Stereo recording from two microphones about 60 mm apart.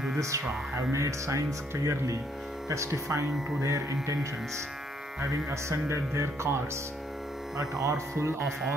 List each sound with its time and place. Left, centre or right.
0.7 s speech: right
5.5 s speech: right
7.5 s speech: right